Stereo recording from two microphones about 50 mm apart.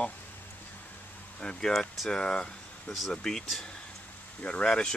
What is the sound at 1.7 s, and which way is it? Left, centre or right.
Speech, centre.